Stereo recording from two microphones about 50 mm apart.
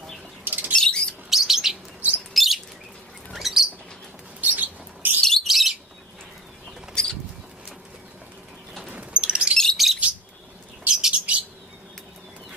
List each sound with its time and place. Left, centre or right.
0.4 s bird flight: right
0.7 s rodents: centre
1.3 s bird: centre
2.0 s bird: right
2.3 s bird: centre
4.4 s bird: right
5.2 s bird: centre
5.5 s bird: centre
6.9 s bird: centre
8.9 s a sound: right
9.8 s bird: centre